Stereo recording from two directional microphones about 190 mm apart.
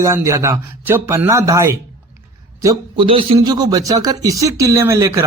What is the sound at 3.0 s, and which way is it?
Speech, 30° right (ahead or behind).